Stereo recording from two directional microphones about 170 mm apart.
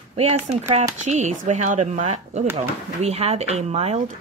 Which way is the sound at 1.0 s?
45° right (ahead or behind).